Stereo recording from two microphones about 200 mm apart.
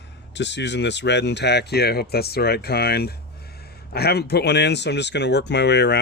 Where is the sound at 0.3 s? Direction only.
60° left (ahead or behind).